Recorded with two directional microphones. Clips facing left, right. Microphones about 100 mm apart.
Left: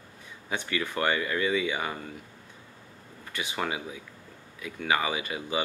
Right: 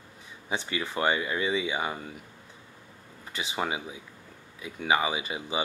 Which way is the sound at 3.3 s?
20° right (ahead or behind).